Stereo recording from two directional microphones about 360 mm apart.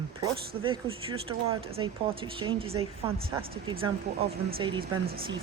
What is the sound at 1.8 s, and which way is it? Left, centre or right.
Speech, centre.